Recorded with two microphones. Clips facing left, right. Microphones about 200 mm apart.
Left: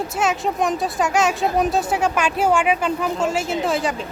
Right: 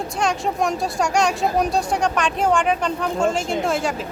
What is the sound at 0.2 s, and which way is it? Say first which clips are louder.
Speech: even; centre (ahead or behind).